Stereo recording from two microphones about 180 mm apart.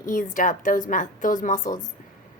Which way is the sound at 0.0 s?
45° left (ahead or behind).